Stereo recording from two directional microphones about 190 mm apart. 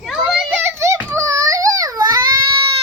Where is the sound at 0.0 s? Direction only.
5° right (ahead or behind); by 2.2 s 20° right (ahead or behind).